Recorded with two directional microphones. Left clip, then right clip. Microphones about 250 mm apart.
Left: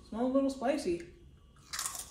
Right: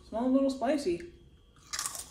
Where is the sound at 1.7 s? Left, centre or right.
Centre.